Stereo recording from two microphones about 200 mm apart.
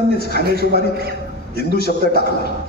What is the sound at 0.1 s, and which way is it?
Speech, 55° left (ahead or behind).